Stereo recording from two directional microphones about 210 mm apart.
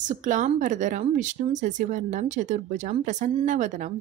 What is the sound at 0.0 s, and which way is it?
A woman's voice, 40° right (ahead or behind).